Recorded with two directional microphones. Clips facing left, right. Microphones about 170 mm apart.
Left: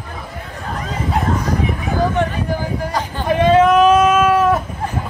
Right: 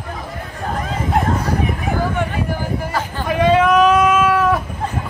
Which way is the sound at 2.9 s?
15° left (ahead or behind).